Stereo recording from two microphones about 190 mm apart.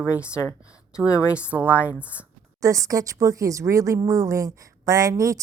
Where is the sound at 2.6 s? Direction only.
15° right (ahead or behind).